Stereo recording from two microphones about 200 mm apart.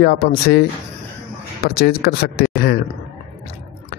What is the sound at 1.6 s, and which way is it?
Speech, 50° left (ahead or behind).